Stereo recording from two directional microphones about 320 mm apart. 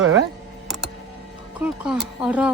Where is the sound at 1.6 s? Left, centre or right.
Centre.